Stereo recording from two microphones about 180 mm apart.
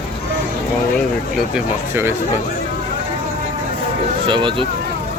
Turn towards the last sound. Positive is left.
turn(degrees=-25)  # may be behind; listen again after turning